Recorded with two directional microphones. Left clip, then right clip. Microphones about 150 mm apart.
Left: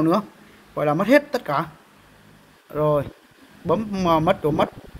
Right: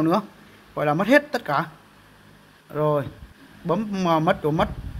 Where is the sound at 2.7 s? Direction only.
5° left (ahead or behind).